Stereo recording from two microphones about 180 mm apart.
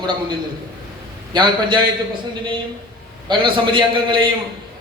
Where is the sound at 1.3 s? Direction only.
25° right (ahead or behind).